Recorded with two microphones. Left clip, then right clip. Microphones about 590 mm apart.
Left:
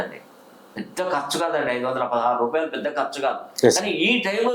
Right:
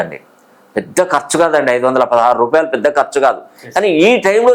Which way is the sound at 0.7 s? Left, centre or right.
Right.